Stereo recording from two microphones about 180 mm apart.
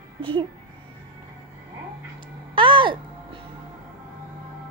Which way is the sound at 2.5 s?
25° right (ahead or behind).